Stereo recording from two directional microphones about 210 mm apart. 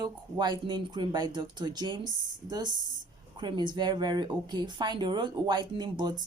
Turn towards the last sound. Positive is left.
turn(degrees=-20)  # may be behind; listen again after turning